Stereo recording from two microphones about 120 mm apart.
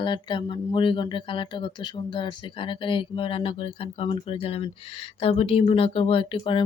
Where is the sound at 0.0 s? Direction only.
40° left (ahead or behind).